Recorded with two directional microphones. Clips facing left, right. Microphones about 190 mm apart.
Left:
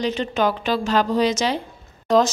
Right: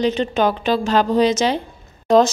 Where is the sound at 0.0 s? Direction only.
25° right (ahead or behind).